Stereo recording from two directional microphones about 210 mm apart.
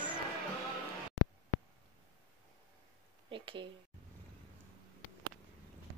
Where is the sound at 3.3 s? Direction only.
25° right (ahead or behind).